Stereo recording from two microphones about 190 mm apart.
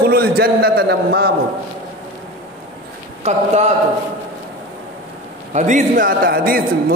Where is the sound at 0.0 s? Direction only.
55° right (ahead or behind).